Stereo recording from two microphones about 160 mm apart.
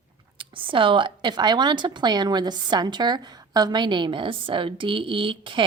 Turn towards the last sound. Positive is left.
turn(degrees=-30)  # may be behind; listen again after turning